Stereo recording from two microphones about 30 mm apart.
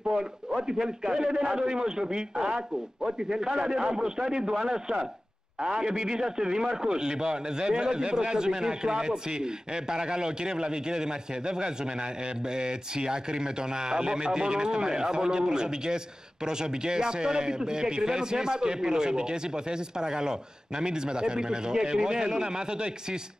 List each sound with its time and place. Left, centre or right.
0.1 s a man's voice: right